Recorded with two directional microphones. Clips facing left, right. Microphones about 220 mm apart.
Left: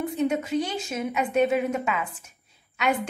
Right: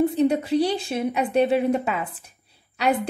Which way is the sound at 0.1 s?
35° right (ahead or behind).